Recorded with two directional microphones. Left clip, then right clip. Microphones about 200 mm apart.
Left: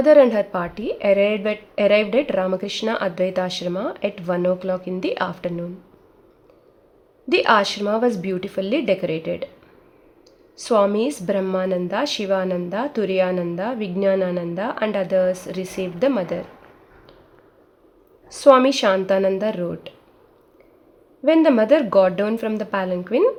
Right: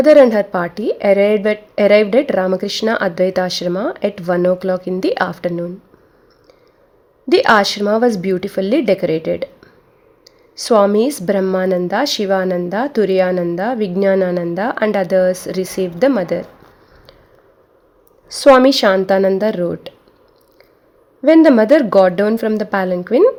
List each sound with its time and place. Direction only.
0.0 s a woman's voice: 35° right (ahead or behind)
7.3 s a woman's voice: 35° right (ahead or behind)
10.6 s a woman's voice: 35° right (ahead or behind)
18.3 s a woman's voice: 35° right (ahead or behind)
21.2 s a woman's voice: 35° right (ahead or behind)